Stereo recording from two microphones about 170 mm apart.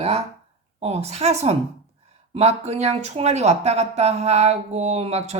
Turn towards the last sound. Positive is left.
turn(degrees=-40)  # may be behind; listen again after turning